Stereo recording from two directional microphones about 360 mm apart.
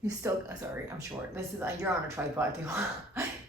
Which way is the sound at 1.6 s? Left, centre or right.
Centre.